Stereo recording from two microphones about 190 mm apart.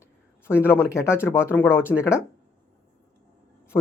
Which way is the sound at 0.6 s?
10° left (ahead or behind).